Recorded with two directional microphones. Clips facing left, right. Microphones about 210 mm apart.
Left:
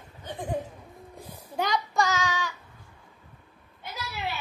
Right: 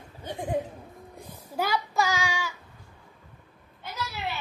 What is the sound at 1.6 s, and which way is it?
Child singing, 5° right (ahead or behind).